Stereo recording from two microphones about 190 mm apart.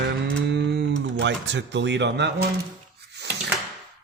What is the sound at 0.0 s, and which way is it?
Cattle, 65° right (ahead or behind).